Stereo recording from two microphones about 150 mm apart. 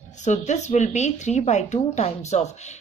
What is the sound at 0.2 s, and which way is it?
A woman's voice, 50° left (ahead or behind).